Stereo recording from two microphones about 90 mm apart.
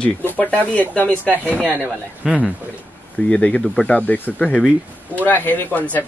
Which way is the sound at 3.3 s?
15° left (ahead or behind).